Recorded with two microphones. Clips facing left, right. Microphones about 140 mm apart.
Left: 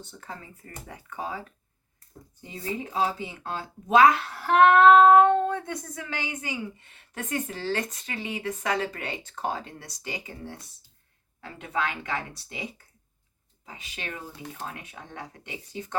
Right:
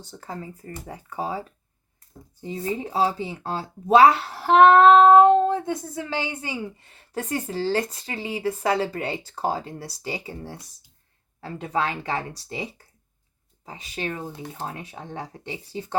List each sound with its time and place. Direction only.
0.0 s speech: 35° right (ahead or behind)